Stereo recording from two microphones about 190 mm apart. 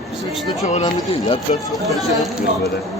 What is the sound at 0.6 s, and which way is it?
Speech, 35° left (ahead or behind).